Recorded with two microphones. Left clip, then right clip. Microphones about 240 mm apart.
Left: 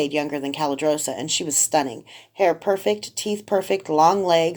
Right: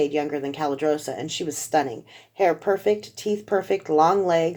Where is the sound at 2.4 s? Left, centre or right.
Left.